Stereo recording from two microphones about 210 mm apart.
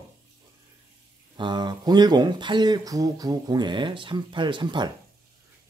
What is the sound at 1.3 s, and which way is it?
Speech, 20° right (ahead or behind).